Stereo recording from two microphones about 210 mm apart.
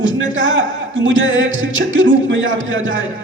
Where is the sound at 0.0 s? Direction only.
65° right (ahead or behind).